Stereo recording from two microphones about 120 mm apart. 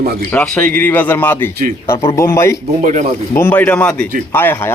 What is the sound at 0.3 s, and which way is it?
A man's voice, 15° left (ahead or behind).